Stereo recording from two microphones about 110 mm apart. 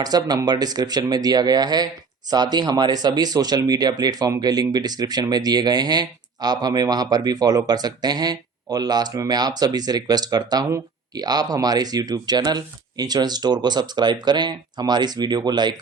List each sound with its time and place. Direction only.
0.0 s speech: 35° right (ahead or behind)